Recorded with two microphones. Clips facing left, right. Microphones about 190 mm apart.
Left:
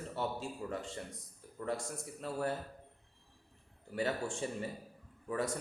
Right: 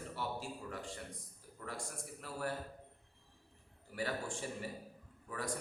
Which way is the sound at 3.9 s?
25° left (ahead or behind).